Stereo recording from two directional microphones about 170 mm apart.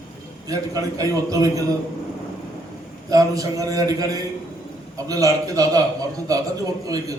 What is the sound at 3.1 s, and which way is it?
A man's voice, 20° right (ahead or behind).